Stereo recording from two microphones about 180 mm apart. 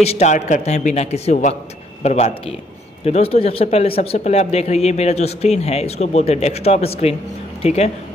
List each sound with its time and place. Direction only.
0.0 s speech: 35° left (ahead or behind)